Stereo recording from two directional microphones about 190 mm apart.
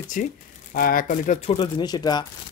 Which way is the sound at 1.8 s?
20° left (ahead or behind).